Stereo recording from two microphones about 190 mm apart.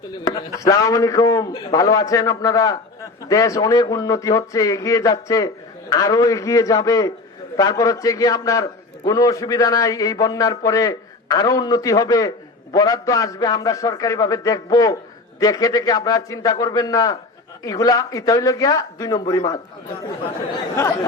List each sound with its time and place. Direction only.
0.3 s a man's voice: 15° left (ahead or behind)